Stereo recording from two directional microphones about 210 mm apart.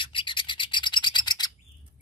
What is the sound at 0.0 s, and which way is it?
Rub, 25° left (ahead or behind).